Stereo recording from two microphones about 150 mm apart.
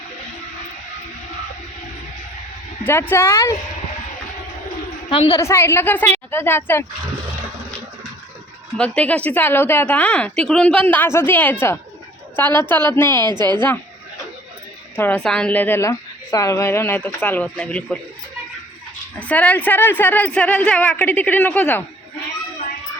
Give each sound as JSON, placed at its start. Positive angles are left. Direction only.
{"t": 2.8, "sound": "speech", "side_deg": 15}
{"t": 5.0, "sound": "a woman's voice", "side_deg": 35}
{"t": 5.4, "sound": "speech", "side_deg": 20}
{"t": 8.8, "sound": "speech", "side_deg": 10}
{"t": 13.2, "sound": "a woman's voice", "side_deg": -30}
{"t": 14.9, "sound": "a woman's voice", "side_deg": 15}
{"t": 19.2, "sound": "speech", "side_deg": 10}